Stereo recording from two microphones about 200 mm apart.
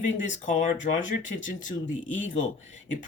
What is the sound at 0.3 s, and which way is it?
Speech, 40° left (ahead or behind).